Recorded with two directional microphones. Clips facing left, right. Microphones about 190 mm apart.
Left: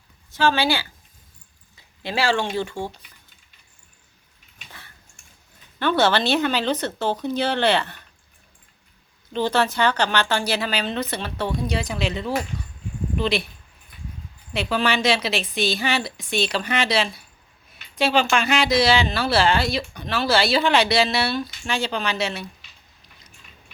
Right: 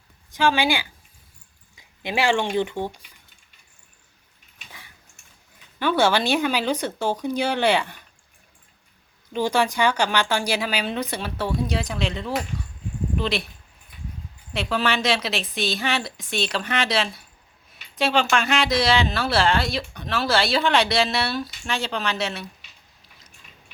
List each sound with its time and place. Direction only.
0.3 s speech: 15° right (ahead or behind)
1.7 s a sound: 15° right (ahead or behind)
2.6 s speech: 20° right (ahead or behind)
5.8 s speech: 10° right (ahead or behind)
9.3 s speech: 10° right (ahead or behind)
14.5 s speech: centre (ahead or behind)